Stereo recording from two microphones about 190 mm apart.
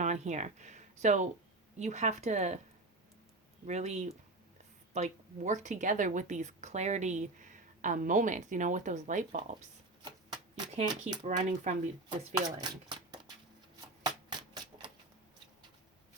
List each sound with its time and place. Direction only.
0.0 s speech: 40° right (ahead or behind)
3.7 s speech: 35° right (ahead or behind)
10.8 s speech: 25° right (ahead or behind)
11.3 s speech: 40° right (ahead or behind)
12.0 s speech: 20° right (ahead or behind)
14.0 s a sound: 20° right (ahead or behind)